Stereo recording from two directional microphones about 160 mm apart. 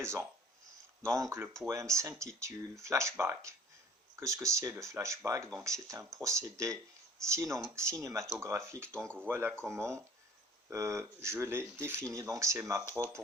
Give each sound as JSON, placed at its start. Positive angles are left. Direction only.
{"t": 0.0, "sound": "speech", "side_deg": -15}
{"t": 8.8, "sound": "speech", "side_deg": 5}
{"t": 9.2, "sound": "speech", "side_deg": -15}